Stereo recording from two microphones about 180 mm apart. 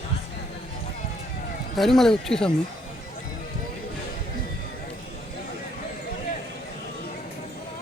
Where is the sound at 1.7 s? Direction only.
Centre (ahead or behind).